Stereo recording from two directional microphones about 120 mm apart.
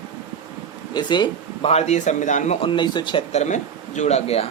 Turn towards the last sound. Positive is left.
turn(degrees=60)  # may be behind; listen again after turning